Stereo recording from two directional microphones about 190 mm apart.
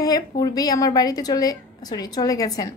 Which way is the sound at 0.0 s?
20° left (ahead or behind).